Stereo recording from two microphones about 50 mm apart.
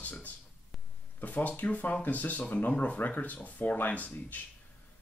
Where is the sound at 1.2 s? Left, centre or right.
Left.